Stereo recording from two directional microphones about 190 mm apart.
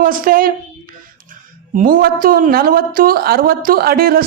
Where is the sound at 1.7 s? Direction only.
50° right (ahead or behind).